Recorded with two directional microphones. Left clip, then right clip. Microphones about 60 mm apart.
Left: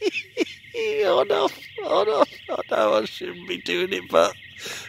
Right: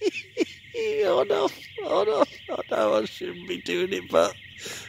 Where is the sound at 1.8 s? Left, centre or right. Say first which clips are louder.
Left 3 dB; right.